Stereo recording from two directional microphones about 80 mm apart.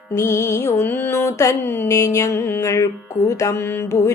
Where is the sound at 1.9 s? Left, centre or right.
Left.